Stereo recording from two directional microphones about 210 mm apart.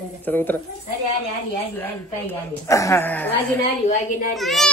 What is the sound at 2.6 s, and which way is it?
Speech, 15° left (ahead or behind).